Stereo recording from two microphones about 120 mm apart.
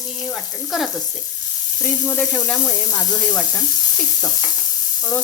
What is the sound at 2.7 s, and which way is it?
Speech, 30° left (ahead or behind).